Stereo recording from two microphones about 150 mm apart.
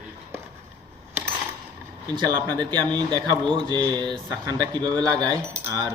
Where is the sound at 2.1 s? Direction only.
25° right (ahead or behind).